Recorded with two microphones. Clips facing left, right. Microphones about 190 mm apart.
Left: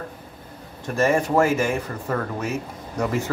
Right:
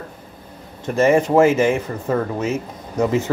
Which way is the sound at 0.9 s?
20° right (ahead or behind).